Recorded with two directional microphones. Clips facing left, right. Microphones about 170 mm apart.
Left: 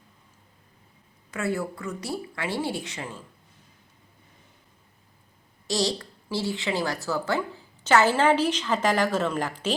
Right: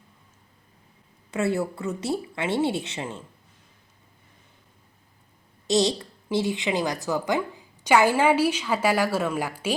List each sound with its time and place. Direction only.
1.3 s speech: 25° right (ahead or behind)
5.6 s a woman's voice: 20° right (ahead or behind)